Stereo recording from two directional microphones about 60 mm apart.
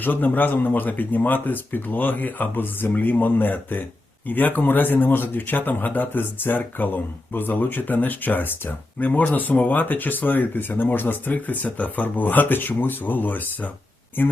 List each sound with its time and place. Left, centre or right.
0.0 s speech: left